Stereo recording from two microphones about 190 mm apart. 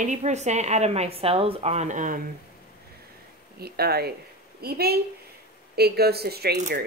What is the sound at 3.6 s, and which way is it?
A woman's voice, 55° right (ahead or behind).